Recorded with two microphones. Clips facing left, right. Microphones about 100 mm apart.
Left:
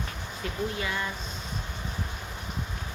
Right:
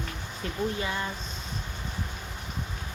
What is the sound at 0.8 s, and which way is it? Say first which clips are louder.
Speech: even; 30° right (ahead or behind).